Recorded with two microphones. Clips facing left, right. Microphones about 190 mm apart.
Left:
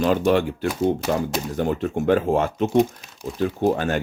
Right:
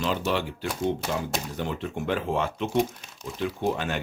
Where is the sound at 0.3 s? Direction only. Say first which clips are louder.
Left 8 dB; 50° left (ahead or behind).